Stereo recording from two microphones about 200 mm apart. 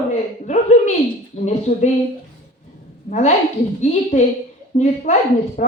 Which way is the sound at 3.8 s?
35° left (ahead or behind).